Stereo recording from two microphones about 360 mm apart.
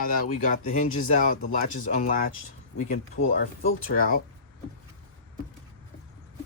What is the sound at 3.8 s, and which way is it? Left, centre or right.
Speech, left.